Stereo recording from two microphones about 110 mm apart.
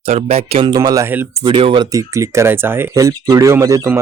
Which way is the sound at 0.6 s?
35° right (ahead or behind).